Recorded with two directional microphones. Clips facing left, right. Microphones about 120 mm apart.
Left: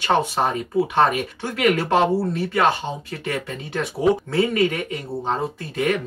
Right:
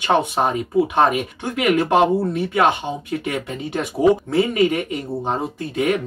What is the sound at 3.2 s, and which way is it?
Speech, 15° right (ahead or behind).